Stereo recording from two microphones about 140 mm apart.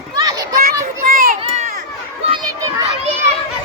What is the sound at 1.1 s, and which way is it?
Run, 90° right.